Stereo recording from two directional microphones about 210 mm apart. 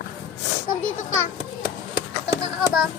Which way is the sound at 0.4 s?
60° left (ahead or behind).